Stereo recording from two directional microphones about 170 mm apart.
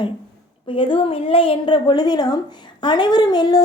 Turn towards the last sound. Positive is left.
turn(degrees=25)  # may be behind; listen again after turning